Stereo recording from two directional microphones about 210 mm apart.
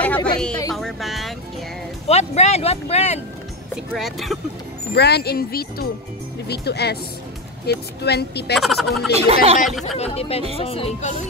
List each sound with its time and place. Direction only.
0.0 s a woman's voice: 5° left (ahead or behind)
2.0 s speech: 30° left (ahead or behind)
3.7 s speech: centre (ahead or behind)
4.9 s speech: 50° left (ahead or behind)
8.5 s speech: centre (ahead or behind)
9.1 s speech: 30° right (ahead or behind)
9.9 s speech: 30° left (ahead or behind)